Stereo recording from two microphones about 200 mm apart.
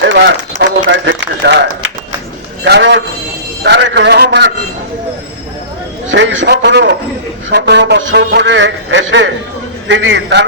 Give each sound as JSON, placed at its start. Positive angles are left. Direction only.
{"t": 0.0, "sound": "a man's voice", "side_deg": -65}
{"t": 2.6, "sound": "a man's voice", "side_deg": -60}
{"t": 6.1, "sound": "a man's voice", "side_deg": -70}